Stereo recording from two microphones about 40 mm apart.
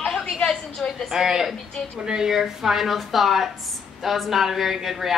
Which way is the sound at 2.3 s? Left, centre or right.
Centre.